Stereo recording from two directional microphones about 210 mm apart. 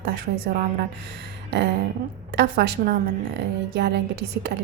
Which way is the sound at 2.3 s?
50° right (ahead or behind).